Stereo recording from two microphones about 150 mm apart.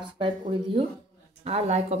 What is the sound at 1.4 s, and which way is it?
Speech, 45° right (ahead or behind).